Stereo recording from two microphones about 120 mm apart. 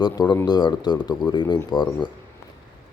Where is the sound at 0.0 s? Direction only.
35° left (ahead or behind).